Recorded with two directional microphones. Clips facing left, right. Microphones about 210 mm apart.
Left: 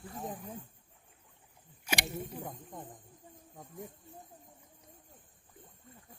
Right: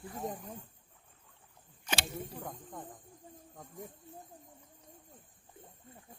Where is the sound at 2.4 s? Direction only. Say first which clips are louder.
Even; 20° left (ahead or behind).